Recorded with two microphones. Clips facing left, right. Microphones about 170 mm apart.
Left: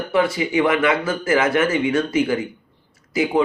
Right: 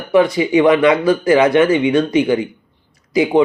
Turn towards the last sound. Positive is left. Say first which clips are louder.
# right 6 dB
turn(degrees=-20)  # may be behind; listen again after turning